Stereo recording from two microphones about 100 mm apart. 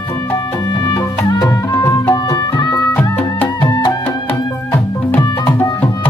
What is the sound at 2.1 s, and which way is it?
Music, 45° left (ahead or behind).